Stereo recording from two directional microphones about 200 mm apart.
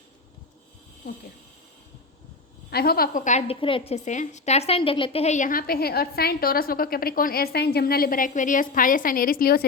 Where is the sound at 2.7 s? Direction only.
50° left (ahead or behind).